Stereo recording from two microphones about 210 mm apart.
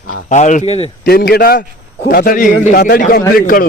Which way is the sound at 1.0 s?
50° left (ahead or behind).